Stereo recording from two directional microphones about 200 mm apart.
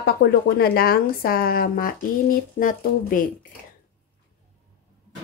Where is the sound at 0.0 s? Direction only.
50° left (ahead or behind).